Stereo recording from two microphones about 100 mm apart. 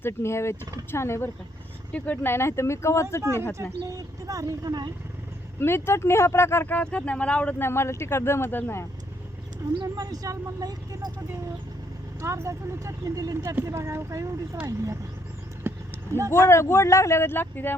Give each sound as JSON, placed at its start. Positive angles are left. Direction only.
{"t": 0.0, "sound": "speech", "side_deg": 25}
{"t": 1.9, "sound": "speech", "side_deg": 15}
{"t": 3.5, "sound": "speech", "side_deg": -35}
{"t": 5.5, "sound": "speech", "side_deg": 25}
{"t": 7.6, "sound": "speech", "side_deg": 25}
{"t": 9.8, "sound": "speech", "side_deg": -40}
{"t": 12.2, "sound": "speech", "side_deg": -30}
{"t": 15.6, "sound": "vehicle", "side_deg": -25}
{"t": 16.3, "sound": "speech", "side_deg": 25}